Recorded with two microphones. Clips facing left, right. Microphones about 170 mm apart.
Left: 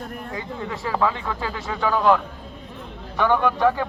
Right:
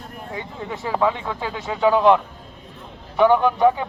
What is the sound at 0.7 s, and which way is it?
Speech, 20° right (ahead or behind).